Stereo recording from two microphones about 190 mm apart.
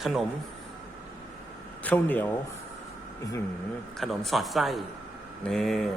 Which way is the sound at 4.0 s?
Centre (ahead or behind).